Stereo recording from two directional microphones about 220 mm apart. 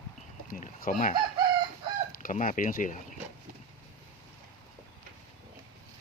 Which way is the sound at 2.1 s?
35° left (ahead or behind).